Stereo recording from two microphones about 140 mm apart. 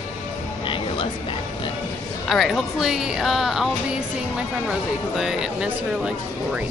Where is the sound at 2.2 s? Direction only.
Centre (ahead or behind).